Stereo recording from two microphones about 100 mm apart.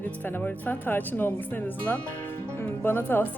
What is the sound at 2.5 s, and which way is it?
Music, 20° left (ahead or behind).